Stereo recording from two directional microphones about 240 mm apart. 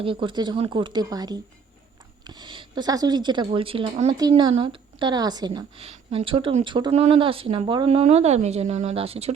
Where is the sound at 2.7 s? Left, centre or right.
Centre.